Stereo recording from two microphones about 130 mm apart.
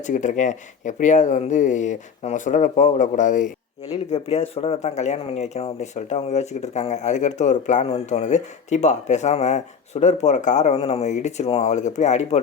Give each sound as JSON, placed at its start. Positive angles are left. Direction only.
{"t": 0.0, "sound": "speech", "side_deg": 70}
{"t": 3.9, "sound": "speech", "side_deg": 50}
{"t": 11.7, "sound": "speech", "side_deg": 65}